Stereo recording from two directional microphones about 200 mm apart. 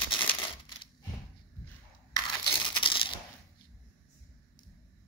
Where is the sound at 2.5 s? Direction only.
25° left (ahead or behind).